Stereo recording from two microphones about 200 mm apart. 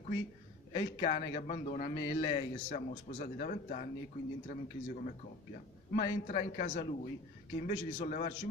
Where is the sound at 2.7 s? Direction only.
40° left (ahead or behind).